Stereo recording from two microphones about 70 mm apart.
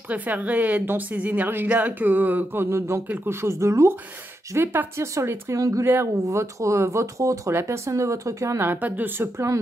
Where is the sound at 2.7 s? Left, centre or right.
Right.